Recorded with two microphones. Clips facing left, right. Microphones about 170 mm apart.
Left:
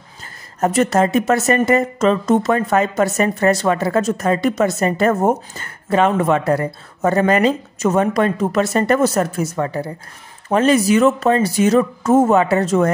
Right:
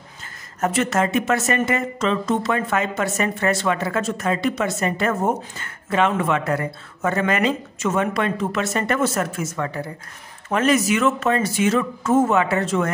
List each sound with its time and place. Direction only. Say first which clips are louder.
0.6 s a woman's voice: left 5 dB; 35° left (ahead or behind)